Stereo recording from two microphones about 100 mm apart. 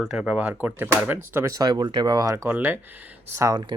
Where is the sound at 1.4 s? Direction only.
40° right (ahead or behind).